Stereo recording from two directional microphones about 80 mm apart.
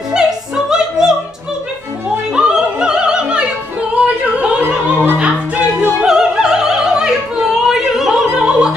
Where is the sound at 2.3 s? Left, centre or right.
Centre.